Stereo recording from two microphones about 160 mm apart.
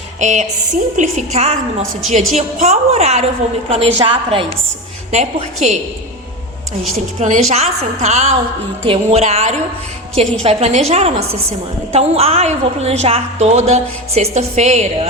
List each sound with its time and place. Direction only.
0.2 s a woman's voice: 50° right (ahead or behind)
5.1 s a woman's voice: 45° right (ahead or behind)
7.2 s a woman's voice: 45° right (ahead or behind)